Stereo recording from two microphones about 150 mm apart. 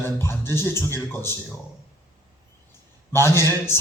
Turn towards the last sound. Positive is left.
turn(degrees=15)  # may be behind; listen again after turning